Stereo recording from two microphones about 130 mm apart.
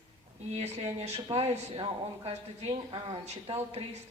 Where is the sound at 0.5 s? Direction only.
50° right (ahead or behind).